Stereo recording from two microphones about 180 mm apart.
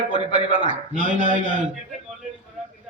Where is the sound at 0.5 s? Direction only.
45° right (ahead or behind).